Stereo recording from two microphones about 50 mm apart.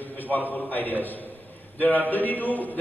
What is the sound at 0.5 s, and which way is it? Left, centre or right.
Mantra, left.